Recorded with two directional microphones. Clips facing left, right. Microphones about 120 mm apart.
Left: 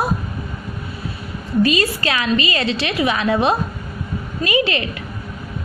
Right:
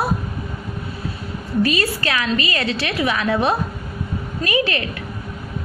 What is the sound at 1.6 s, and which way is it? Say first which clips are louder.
A woman's voice: left 3 dB; 20° left (ahead or behind).